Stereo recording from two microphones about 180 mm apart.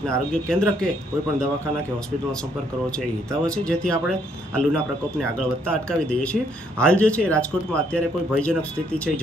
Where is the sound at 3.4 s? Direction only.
5° left (ahead or behind).